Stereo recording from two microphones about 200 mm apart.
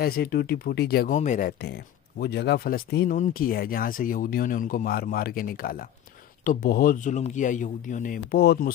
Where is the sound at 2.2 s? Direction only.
55° left (ahead or behind).